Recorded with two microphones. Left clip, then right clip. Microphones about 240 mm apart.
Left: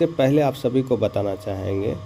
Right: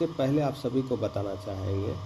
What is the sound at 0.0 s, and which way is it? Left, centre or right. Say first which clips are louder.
Speech: left 9 dB; left.